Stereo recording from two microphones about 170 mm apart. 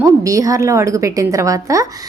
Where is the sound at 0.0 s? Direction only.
20° right (ahead or behind).